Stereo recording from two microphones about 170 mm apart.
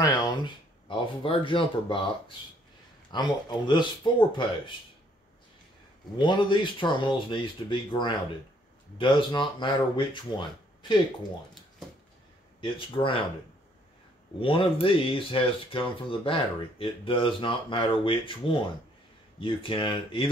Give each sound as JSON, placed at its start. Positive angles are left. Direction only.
{"t": 0.0, "sound": "speech", "side_deg": 25}
{"t": 6.1, "sound": "speech", "side_deg": 30}
{"t": 12.5, "sound": "speech", "side_deg": 30}
{"t": 14.4, "sound": "speech", "side_deg": 30}